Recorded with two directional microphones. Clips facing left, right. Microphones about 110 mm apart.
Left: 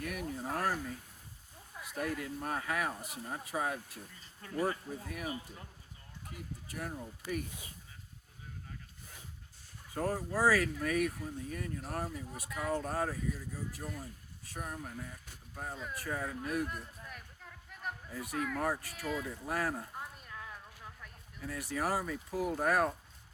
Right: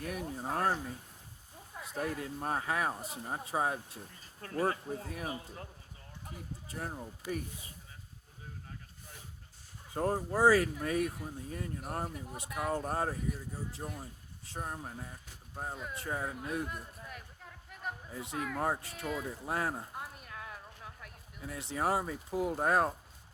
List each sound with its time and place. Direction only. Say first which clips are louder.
0.0 s a sound: right 1 dB; 30° right (ahead or behind)
1.8 s speech: right 1 dB; 30° right (ahead or behind)
6.3 s speech: even; 30° right (ahead or behind)
9.9 s speech: right 2 dB; 25° right (ahead or behind)
16.6 s a sound: even; 5° right (ahead or behind)
18.1 s speech: left 2 dB; 25° right (ahead or behind)
19.0 s speech: even; centre (ahead or behind)
19.5 s speech: even; 25° right (ahead or behind)
20.0 s a sound: right 1 dB; 5° right (ahead or behind)
21.4 s speech: right 2 dB; 25° right (ahead or behind)